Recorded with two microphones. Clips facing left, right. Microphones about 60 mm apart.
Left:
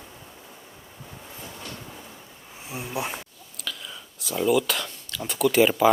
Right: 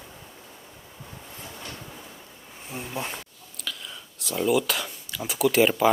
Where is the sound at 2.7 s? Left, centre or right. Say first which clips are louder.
Left 2 dB; centre.